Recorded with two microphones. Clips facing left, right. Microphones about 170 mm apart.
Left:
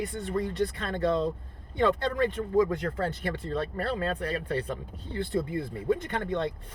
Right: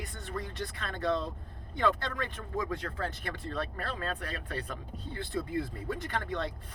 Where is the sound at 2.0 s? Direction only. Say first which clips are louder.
Left 10 dB; 35° left (ahead or behind).